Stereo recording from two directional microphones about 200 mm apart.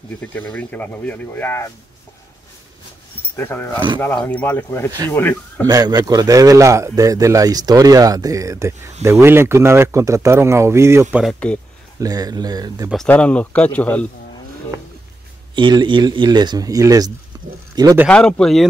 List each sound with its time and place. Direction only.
0.2 s speech: 5° left (ahead or behind)
3.3 s speech: 10° left (ahead or behind)
5.7 s speech: 20° right (ahead or behind)
11.3 s speech: 5° left (ahead or behind)
12.0 s a man's voice: 20° right (ahead or behind)
12.9 s speech: 5° left (ahead or behind)
15.5 s a man's voice: 25° right (ahead or behind)
18.0 s speech: 5° left (ahead or behind)